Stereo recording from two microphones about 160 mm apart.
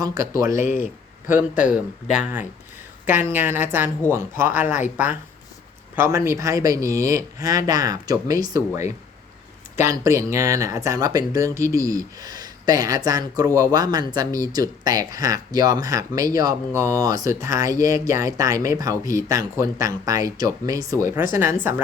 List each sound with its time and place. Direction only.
0.2 s speech: 20° right (ahead or behind)
0.5 s speech: 55° left (ahead or behind)
1.3 s a woman's voice: 10° right (ahead or behind)